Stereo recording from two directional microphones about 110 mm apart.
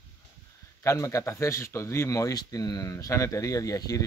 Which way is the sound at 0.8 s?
30° left (ahead or behind).